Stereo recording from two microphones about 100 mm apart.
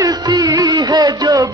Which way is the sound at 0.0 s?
40° right (ahead or behind).